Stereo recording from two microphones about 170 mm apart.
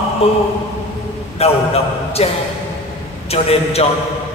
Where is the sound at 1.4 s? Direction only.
35° left (ahead or behind).